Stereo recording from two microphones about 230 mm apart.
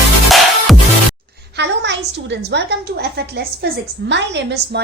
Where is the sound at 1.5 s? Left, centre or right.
Right.